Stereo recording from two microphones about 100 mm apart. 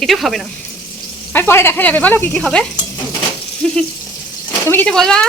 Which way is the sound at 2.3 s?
5° left (ahead or behind).